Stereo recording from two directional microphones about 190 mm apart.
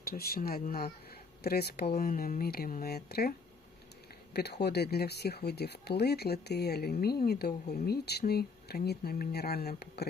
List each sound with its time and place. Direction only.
0.0 s speech: 50° left (ahead or behind)
4.4 s speech: 60° left (ahead or behind)